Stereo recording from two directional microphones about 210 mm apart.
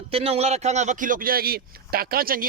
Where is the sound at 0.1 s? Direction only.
30° right (ahead or behind).